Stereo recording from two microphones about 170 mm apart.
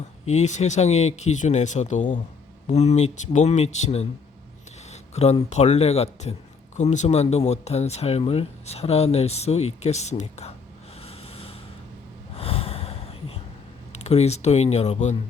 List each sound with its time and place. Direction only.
0.3 s speech: 40° left (ahead or behind)
11.0 s snort: 35° left (ahead or behind)
12.4 s a sound: 35° left (ahead or behind)
13.9 s speech: 40° left (ahead or behind)